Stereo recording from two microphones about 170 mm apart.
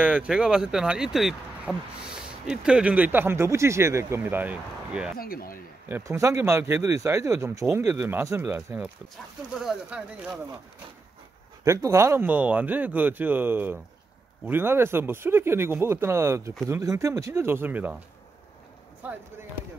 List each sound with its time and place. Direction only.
0.0 s speech: 5° right (ahead or behind)
5.1 s speech: 60° left (ahead or behind)
5.9 s speech: 15° right (ahead or behind)
11.6 s speech: 15° right (ahead or behind)
19.0 s speech: 10° right (ahead or behind)